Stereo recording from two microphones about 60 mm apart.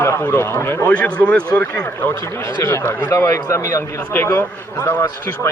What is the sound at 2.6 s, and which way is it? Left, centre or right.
Speech, left.